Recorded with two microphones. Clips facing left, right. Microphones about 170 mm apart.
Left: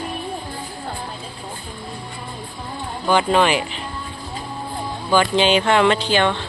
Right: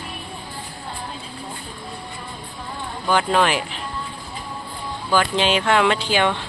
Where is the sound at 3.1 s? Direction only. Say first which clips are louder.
Left 2 dB; centre (ahead or behind).